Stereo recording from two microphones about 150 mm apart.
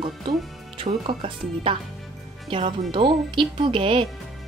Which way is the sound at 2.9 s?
35° right (ahead or behind).